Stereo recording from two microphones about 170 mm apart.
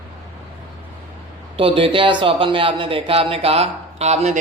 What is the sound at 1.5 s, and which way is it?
Speech, 30° right (ahead or behind).